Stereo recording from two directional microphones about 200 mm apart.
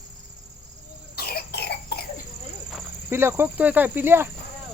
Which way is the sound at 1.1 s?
50° left (ahead or behind).